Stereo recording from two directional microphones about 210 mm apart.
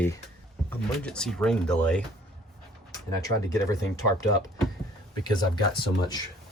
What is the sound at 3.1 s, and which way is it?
Speech, 15° left (ahead or behind).